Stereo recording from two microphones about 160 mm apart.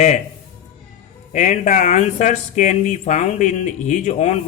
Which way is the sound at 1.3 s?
50° left (ahead or behind).